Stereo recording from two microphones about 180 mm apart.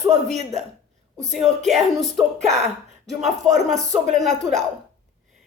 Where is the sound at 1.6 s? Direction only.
Centre (ahead or behind).